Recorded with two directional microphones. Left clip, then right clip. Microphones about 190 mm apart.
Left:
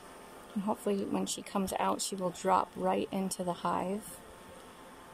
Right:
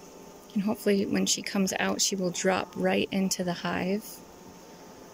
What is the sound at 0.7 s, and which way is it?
Speech, 20° right (ahead or behind).